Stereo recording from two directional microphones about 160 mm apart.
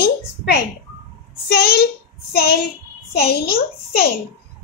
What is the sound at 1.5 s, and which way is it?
Speech, 90° left.